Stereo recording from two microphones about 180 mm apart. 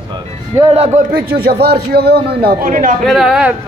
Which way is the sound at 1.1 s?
60° right (ahead or behind).